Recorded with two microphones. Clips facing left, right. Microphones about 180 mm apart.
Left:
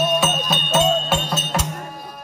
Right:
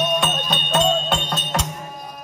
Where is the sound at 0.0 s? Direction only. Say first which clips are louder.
Left 2 dB; 5° left (ahead or behind).